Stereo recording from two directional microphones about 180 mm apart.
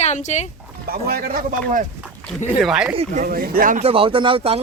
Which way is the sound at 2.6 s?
5° right (ahead or behind).